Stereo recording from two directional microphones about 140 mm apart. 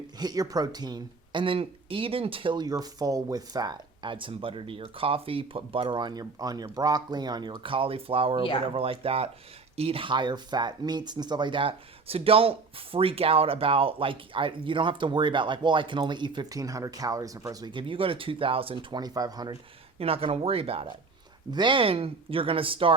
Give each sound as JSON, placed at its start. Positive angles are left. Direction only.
{"t": 0.2, "sound": "speech", "side_deg": -25}
{"t": 20.0, "sound": "speech", "side_deg": -45}